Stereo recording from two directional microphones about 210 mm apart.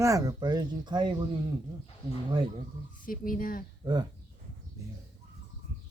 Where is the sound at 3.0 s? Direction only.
40° left (ahead or behind).